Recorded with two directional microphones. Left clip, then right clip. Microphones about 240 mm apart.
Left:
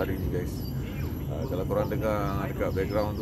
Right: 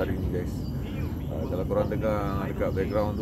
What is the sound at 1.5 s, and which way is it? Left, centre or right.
Speech, centre.